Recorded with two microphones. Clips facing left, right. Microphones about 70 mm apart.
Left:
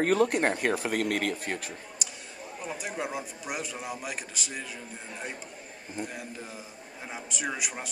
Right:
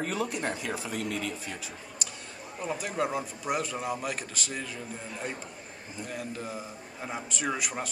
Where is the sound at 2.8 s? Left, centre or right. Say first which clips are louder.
Right 4 dB; centre.